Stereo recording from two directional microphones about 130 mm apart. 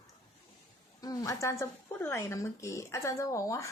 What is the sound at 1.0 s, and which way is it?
Speech, 25° left (ahead or behind).